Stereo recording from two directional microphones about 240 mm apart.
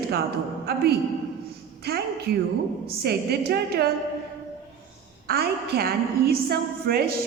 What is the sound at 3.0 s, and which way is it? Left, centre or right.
Speech, right.